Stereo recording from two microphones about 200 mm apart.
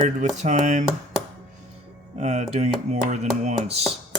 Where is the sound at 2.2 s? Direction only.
35° right (ahead or behind).